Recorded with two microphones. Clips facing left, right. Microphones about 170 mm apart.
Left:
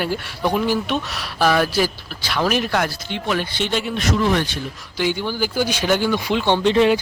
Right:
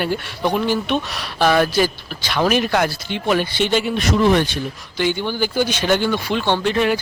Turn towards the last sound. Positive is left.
turn(degrees=20)  # may be behind; listen again after turning